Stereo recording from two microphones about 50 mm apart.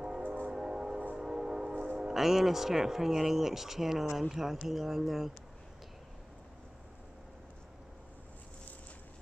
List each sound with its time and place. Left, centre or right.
0.2 s train: right
0.5 s train: centre
2.0 s speech: centre